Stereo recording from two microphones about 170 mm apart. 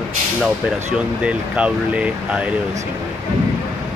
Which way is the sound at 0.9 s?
5° right (ahead or behind).